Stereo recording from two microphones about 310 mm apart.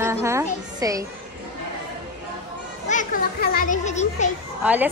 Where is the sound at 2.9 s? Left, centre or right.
Left.